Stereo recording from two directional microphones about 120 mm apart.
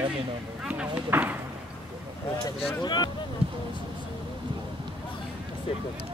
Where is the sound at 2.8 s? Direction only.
35° left (ahead or behind).